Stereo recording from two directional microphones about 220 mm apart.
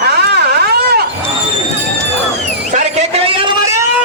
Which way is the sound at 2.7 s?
30° right (ahead or behind).